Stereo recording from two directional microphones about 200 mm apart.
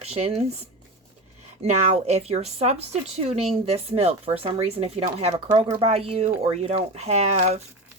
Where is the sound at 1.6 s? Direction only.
35° right (ahead or behind).